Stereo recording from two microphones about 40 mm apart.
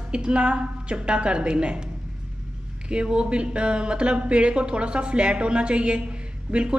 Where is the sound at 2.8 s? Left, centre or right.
Right.